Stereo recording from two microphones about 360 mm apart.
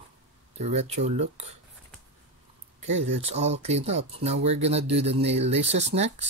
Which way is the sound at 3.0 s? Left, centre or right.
Centre.